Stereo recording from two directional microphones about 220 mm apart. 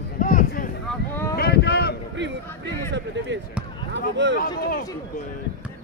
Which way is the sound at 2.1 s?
55° right (ahead or behind).